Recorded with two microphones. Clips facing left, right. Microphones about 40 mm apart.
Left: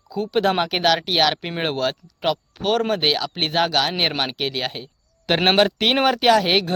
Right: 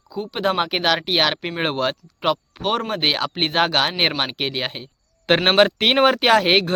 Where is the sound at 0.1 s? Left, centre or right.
Centre.